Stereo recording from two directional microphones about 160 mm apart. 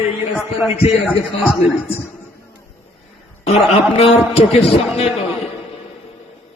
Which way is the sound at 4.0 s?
40° left (ahead or behind).